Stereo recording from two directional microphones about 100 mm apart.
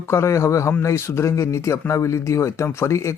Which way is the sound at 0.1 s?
30° left (ahead or behind).